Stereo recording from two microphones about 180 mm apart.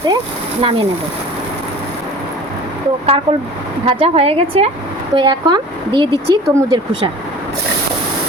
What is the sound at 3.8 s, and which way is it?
A woman's voice, 30° right (ahead or behind).